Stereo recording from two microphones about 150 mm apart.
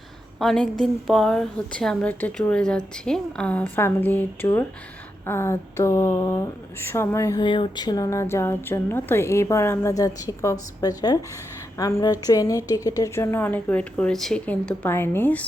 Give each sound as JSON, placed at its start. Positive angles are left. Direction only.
{"t": 0.3, "sound": "a woman's voice", "side_deg": 5}
{"t": 7.3, "sound": "a woman's voice", "side_deg": 30}